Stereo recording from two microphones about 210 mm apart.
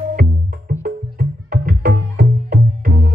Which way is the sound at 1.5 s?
45° right (ahead or behind).